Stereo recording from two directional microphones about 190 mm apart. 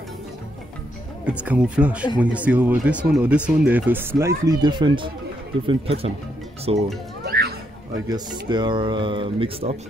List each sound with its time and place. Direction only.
1.2 s speech: 5° right (ahead or behind)
4.5 s speech: 20° right (ahead or behind)
7.2 s music: 55° right (ahead or behind)
8.1 s speech: 20° right (ahead or behind)